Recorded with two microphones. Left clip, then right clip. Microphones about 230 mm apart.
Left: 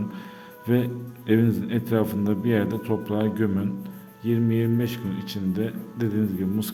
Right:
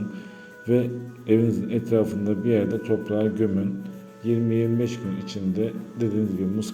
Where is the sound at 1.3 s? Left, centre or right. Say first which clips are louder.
Right 1 dB; left.